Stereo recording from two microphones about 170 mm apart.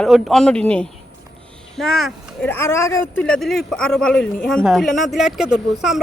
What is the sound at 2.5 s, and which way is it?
Speech, 15° left (ahead or behind).